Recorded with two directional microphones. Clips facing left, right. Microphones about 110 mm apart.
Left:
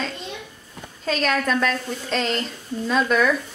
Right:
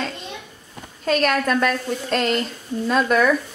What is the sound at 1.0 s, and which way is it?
Speech, 5° right (ahead or behind).